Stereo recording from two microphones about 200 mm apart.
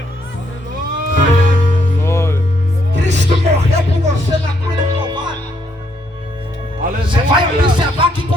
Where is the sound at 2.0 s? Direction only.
15° left (ahead or behind).